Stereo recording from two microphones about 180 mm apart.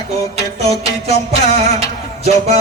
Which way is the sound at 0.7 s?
35° right (ahead or behind).